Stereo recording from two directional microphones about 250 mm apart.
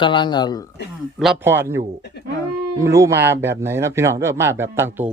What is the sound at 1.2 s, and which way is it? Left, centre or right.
A man's voice, centre.